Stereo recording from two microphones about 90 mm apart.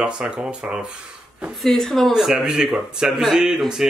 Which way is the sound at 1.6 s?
5° left (ahead or behind).